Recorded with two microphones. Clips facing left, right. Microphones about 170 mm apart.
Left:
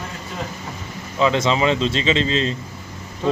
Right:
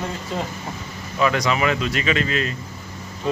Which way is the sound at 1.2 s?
25° left (ahead or behind).